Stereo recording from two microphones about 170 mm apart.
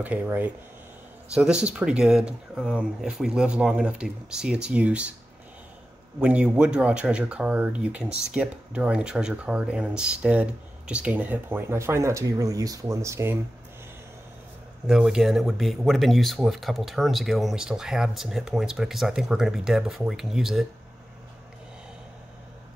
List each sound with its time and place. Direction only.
0.0 s speech: 10° right (ahead or behind)
6.1 s speech: 5° right (ahead or behind)
14.9 s speech: 5° right (ahead or behind)